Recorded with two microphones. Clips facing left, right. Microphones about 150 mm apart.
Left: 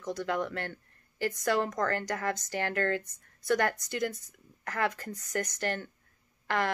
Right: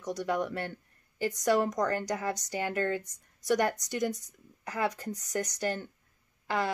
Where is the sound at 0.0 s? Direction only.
15° right (ahead or behind).